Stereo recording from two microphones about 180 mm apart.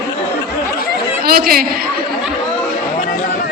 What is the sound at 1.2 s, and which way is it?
Speech, 55° right (ahead or behind).